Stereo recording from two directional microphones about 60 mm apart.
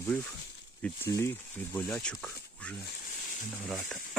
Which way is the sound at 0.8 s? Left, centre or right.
Left.